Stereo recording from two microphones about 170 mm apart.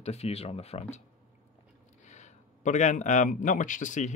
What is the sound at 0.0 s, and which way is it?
Speech, 40° left (ahead or behind).